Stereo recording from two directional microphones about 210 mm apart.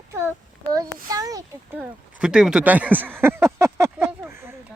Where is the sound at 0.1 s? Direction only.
10° right (ahead or behind).